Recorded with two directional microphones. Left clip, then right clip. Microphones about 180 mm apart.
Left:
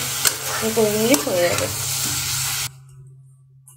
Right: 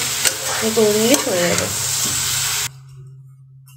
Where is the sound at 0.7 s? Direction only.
Centre (ahead or behind).